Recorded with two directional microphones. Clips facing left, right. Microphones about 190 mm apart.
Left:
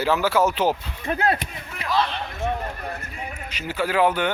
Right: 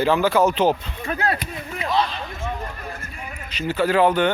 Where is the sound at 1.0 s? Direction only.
30° left (ahead or behind).